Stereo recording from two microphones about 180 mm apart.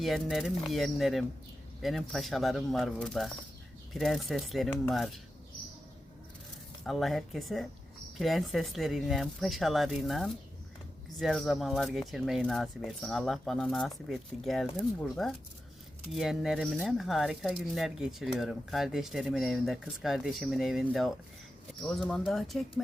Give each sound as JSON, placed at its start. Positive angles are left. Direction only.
{"t": 0.0, "sound": "speech", "side_deg": 0}
{"t": 6.8, "sound": "speech", "side_deg": 0}